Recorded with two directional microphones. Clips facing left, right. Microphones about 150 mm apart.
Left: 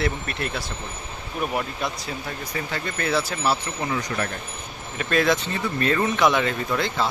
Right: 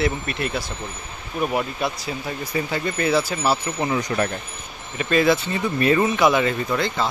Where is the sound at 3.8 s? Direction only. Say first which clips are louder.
Right 4 dB; 25° right (ahead or behind).